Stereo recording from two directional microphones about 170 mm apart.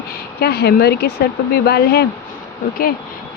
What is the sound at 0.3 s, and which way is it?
Speech, 70° left (ahead or behind).